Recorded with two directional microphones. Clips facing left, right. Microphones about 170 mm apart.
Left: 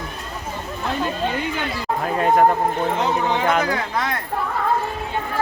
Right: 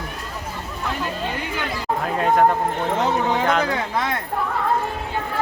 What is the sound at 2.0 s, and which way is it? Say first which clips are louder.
Speech: left 1 dB; centre (ahead or behind).